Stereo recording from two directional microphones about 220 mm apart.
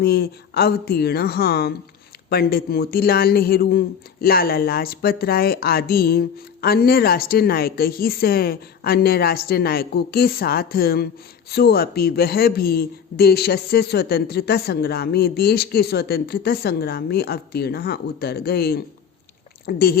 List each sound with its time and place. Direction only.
0.0 s speech: 45° left (ahead or behind)